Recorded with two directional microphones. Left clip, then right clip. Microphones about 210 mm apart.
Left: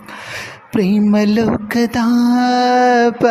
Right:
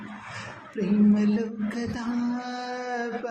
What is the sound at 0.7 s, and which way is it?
Mantra, 50° left (ahead or behind).